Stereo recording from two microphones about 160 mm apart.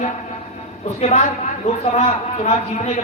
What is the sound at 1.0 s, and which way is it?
A woman's voice, 45° left (ahead or behind).